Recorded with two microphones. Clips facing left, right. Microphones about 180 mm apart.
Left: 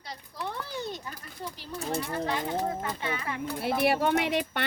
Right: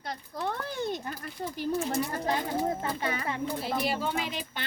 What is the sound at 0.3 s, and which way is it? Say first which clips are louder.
Speech: right 2 dB; 55° right (ahead or behind).